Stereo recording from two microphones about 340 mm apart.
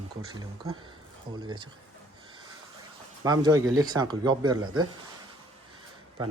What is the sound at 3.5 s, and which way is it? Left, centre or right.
Speech, right.